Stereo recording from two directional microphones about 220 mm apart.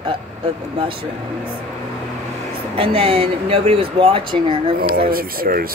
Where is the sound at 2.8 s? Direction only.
25° right (ahead or behind).